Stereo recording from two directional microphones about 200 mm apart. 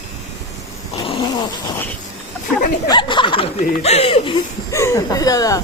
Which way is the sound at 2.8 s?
20° left (ahead or behind).